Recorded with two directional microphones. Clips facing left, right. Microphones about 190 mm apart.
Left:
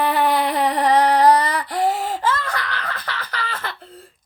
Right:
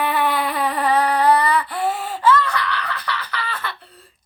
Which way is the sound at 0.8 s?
40° left (ahead or behind).